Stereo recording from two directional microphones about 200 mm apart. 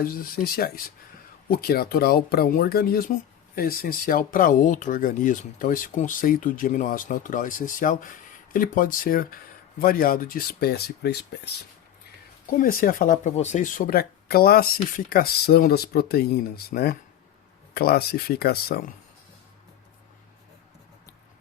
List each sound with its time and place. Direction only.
0.0 s speech: 45° left (ahead or behind)
12.5 s speech: 45° left (ahead or behind)